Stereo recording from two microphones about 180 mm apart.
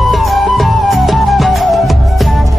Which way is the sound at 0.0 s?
Centre (ahead or behind).